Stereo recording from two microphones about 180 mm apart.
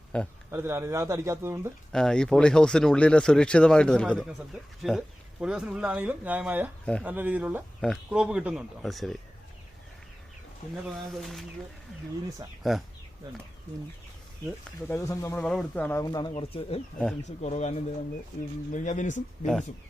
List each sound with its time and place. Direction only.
0.1 s speech: 5° left (ahead or behind)
0.5 s speech: 15° right (ahead or behind)
1.9 s speech: 5° left (ahead or behind)
10.9 s speech: centre (ahead or behind)
12.7 s speech: centre (ahead or behind)
14.8 s speech: 15° left (ahead or behind)
15.4 s speech: 5° left (ahead or behind)
16.0 s speech: 20° left (ahead or behind); by 19.5 s 45° left (ahead or behind)